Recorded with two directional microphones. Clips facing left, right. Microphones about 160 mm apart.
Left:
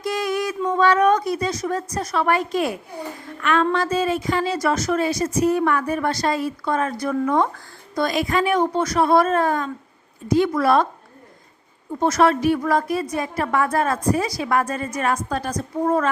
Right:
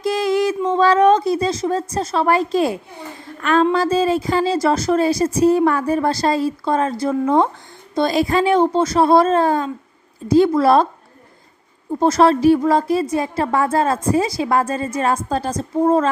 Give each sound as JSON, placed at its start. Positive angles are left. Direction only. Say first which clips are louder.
{"t": 0.0, "sound": "a sound", "louder": "right 6 dB", "side_deg": -25}
{"t": 3.4, "sound": "a woman's voice", "louder": "right 4 dB", "side_deg": -35}
{"t": 11.9, "sound": "a woman's voice", "louder": "right 4 dB", "side_deg": -30}